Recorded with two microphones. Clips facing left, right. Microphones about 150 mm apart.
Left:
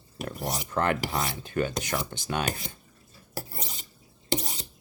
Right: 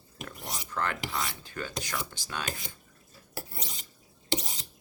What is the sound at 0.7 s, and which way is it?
Speech, 20° left (ahead or behind).